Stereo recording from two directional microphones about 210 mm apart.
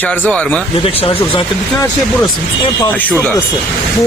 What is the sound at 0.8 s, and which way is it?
Speech, 25° left (ahead or behind).